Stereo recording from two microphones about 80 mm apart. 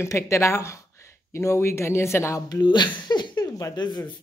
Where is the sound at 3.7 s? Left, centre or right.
Left.